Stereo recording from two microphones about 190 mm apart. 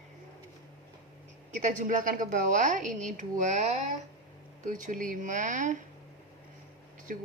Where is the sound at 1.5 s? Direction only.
40° right (ahead or behind).